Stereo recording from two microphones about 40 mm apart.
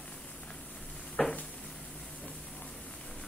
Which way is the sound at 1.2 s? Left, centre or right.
Centre.